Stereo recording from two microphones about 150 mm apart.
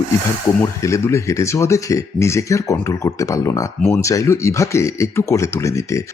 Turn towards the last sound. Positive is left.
turn(degrees=20)  # may be behind; listen again after turning